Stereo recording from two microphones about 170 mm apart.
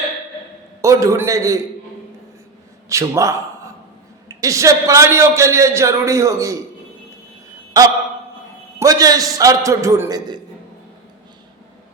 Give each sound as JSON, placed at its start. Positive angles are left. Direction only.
{"t": 0.8, "sound": "a man's voice", "side_deg": -20}
{"t": 2.9, "sound": "a man's voice", "side_deg": -20}
{"t": 8.8, "sound": "a man's voice", "side_deg": -20}